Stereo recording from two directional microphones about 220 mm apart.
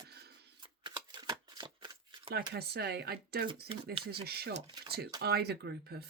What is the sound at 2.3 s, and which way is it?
Speech, 45° right (ahead or behind).